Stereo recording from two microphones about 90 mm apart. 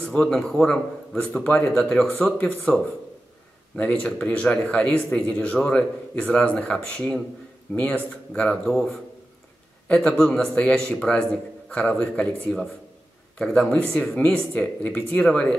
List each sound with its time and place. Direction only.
0.0 s a man's voice: 10° left (ahead or behind)
13.4 s speech: 10° left (ahead or behind)